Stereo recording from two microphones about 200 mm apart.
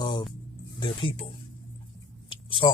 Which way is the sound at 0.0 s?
20° left (ahead or behind).